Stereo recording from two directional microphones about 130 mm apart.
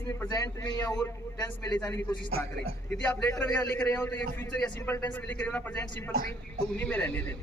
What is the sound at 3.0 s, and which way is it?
A man's voice, 15° left (ahead or behind).